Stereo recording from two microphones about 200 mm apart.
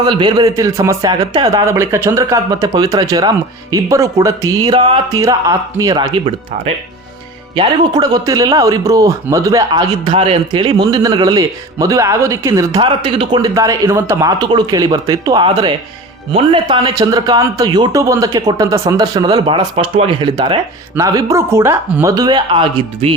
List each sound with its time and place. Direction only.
0.0 s a man's voice: 20° right (ahead or behind)
7.5 s a man's voice: 20° right (ahead or behind)